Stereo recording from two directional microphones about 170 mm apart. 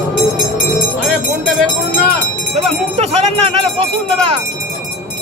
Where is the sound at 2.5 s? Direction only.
40° right (ahead or behind).